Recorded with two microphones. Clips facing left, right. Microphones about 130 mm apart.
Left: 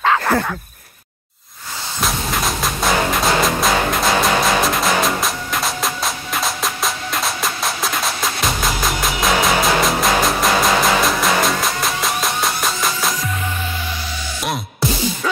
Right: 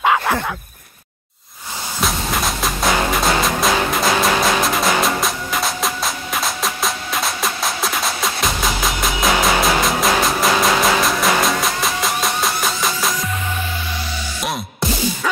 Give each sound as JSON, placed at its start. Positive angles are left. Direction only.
{"t": 0.0, "sound": "a sound", "side_deg": -10}
{"t": 2.0, "sound": "music", "side_deg": 0}
{"t": 14.4, "sound": "music", "side_deg": 0}